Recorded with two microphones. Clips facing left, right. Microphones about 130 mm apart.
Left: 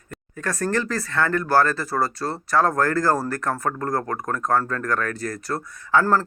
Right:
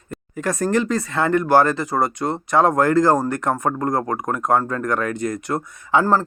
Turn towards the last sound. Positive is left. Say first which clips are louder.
# right 2 dB
turn(degrees=-15)  # may be behind; listen again after turning